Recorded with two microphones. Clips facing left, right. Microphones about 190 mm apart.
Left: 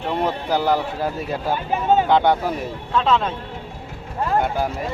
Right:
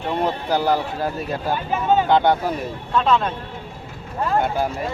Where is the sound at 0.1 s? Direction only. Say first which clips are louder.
Even; centre (ahead or behind).